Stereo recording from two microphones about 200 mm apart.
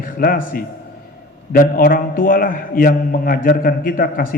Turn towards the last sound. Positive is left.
turn(degrees=45)  # may be behind; listen again after turning